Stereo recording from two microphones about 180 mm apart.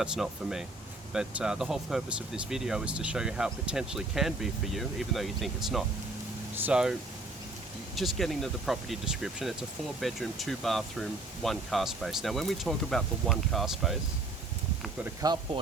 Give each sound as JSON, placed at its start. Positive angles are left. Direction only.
{"t": 0.0, "sound": "speech", "side_deg": -5}
{"t": 7.9, "sound": "speech", "side_deg": 0}
{"t": 15.2, "sound": "speech", "side_deg": -20}